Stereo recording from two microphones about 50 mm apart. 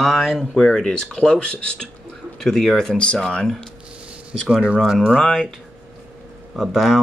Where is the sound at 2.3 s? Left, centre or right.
Centre.